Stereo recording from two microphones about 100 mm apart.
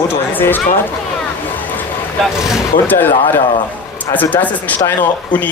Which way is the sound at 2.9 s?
20° left (ahead or behind).